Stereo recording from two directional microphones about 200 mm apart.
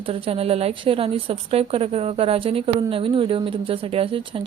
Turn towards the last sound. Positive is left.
turn(degrees=-25)  # may be behind; listen again after turning